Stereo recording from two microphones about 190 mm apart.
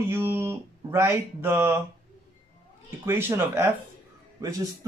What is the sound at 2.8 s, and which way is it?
Speech, 10° right (ahead or behind).